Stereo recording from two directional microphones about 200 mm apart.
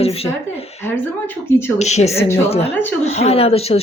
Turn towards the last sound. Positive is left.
turn(degrees=30)  # may be behind; listen again after turning